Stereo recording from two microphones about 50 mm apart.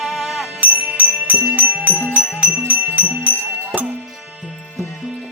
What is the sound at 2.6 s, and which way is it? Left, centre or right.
Music, right.